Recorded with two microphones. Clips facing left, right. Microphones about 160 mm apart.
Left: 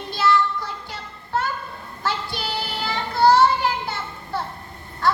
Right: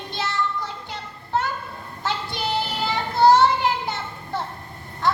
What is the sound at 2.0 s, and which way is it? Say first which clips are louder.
Child singing: right 1 dB; 20° right (ahead or behind).